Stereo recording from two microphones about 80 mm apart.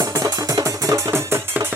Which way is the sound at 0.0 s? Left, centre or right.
Right.